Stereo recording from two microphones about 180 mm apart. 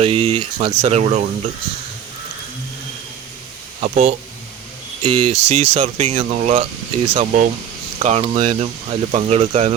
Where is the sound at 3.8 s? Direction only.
40° right (ahead or behind).